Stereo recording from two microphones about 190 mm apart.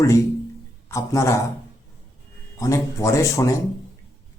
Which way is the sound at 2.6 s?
15° left (ahead or behind).